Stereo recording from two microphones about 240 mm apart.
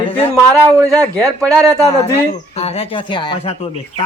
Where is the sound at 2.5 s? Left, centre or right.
Left.